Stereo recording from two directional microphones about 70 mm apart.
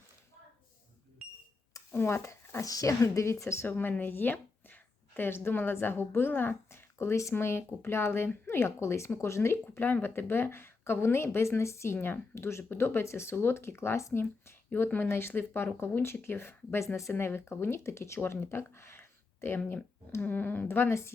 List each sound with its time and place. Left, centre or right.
1.9 s speech: left
3.7 s a woman's voice: left
11.9 s speech: left